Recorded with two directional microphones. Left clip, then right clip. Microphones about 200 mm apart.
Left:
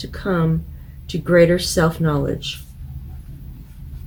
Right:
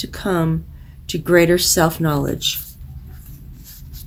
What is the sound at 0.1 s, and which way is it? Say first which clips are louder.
Speech: even; 50° right (ahead or behind).